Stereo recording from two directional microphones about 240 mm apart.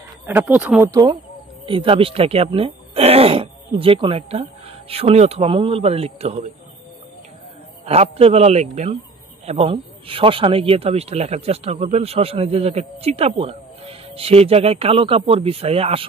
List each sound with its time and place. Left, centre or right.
0.3 s speech: centre; by 6.5 s right
7.8 s speech: right